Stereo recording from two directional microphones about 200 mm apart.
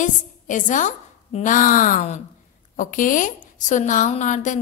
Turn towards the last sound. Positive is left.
turn(degrees=40)  # may be behind; listen again after turning